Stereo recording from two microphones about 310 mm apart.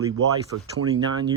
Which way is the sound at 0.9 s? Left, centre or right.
Centre.